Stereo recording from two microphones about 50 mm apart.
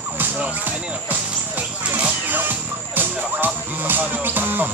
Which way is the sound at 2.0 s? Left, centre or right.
Right.